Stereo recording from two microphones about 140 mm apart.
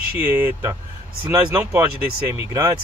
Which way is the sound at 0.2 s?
15° right (ahead or behind).